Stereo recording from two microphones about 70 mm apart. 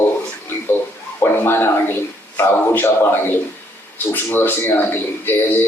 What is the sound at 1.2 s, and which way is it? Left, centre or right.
A man's voice, left.